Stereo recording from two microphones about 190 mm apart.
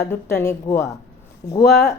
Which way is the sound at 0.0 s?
15° left (ahead or behind).